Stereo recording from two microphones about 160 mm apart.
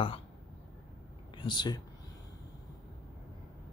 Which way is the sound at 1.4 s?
30° left (ahead or behind).